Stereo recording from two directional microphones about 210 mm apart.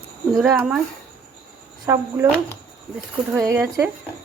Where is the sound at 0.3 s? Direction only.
Centre (ahead or behind).